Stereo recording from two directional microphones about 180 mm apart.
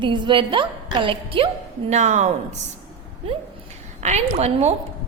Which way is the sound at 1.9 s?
40° right (ahead or behind).